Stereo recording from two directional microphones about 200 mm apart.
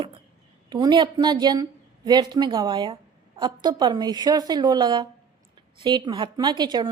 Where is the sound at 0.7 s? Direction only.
20° right (ahead or behind).